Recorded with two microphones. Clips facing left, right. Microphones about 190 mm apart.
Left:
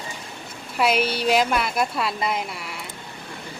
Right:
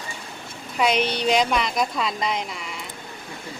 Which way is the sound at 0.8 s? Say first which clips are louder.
Even; 5° left (ahead or behind).